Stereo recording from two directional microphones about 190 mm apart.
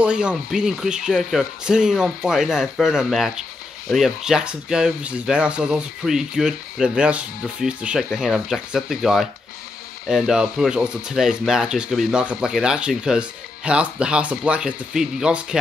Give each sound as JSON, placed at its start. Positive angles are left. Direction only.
{"t": 0.0, "sound": "speech", "side_deg": -5}